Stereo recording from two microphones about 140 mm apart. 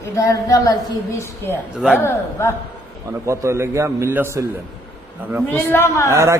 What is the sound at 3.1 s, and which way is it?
A man's voice, 20° right (ahead or behind).